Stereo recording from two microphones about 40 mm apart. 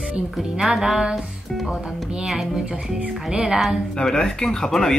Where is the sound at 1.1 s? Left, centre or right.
Centre.